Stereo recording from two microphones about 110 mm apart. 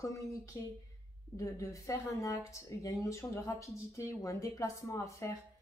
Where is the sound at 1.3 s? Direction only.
30° left (ahead or behind).